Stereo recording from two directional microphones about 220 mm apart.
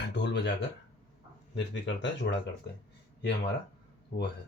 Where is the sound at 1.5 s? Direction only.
55° left (ahead or behind).